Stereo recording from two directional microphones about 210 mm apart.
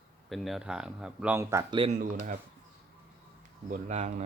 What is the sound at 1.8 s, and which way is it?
Speech, 35° right (ahead or behind).